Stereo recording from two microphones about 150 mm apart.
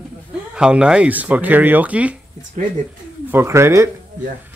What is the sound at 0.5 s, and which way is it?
Speech, 5° right (ahead or behind).